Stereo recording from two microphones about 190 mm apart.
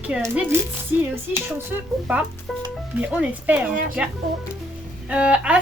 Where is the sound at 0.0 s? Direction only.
5° right (ahead or behind).